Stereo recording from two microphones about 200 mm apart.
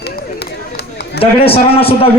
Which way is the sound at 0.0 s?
55° left (ahead or behind).